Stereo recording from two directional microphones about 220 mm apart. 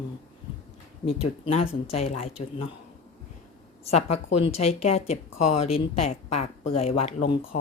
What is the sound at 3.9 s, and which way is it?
Speech, 30° left (ahead or behind).